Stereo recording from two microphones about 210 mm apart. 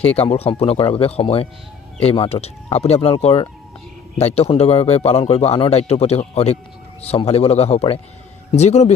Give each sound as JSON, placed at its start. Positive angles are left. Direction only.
{"t": 0.0, "sound": "speech", "side_deg": 30}